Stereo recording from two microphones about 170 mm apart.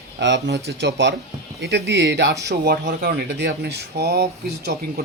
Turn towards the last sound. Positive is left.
turn(degrees=-70)  # may be behind; listen again after turning